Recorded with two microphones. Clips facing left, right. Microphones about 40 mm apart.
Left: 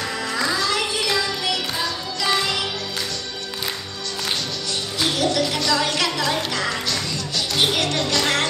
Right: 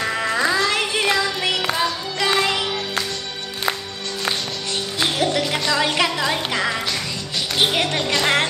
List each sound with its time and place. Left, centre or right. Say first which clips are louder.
0.2 s music: right 3 dB; right
5.0 s music: even; right